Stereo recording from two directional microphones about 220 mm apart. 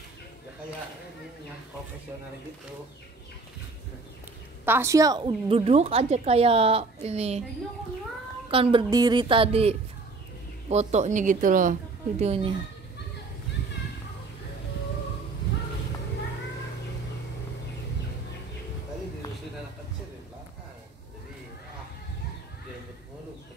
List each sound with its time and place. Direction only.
4.6 s a woman's voice: 10° right (ahead or behind); by 7.4 s 30° right (ahead or behind)
8.5 s a woman's voice: 25° right (ahead or behind)